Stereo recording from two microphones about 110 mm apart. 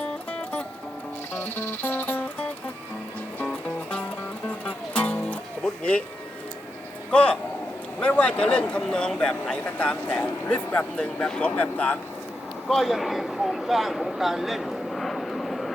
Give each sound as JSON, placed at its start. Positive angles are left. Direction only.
{"t": 0.0, "sound": "music", "side_deg": 10}
{"t": 7.1, "sound": "speech", "side_deg": 10}
{"t": 12.6, "sound": "speech", "side_deg": 0}